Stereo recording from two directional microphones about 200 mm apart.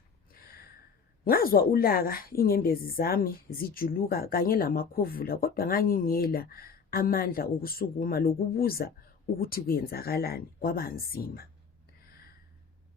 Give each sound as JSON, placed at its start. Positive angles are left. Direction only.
{"t": 1.2, "sound": "a woman's voice", "side_deg": 45}